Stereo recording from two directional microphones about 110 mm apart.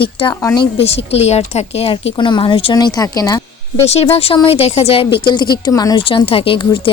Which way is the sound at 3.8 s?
70° left (ahead or behind).